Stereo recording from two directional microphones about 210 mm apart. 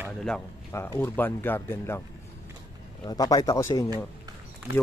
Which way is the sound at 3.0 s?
20° left (ahead or behind).